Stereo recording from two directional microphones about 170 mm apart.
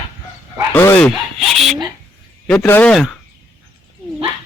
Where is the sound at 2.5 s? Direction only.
10° left (ahead or behind).